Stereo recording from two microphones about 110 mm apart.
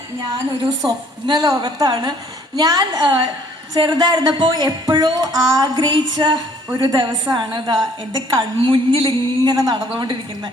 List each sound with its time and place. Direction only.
0.9 s a woman's voice: 40° right (ahead or behind)